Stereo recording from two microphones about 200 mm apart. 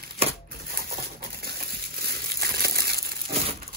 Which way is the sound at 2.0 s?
50° right (ahead or behind).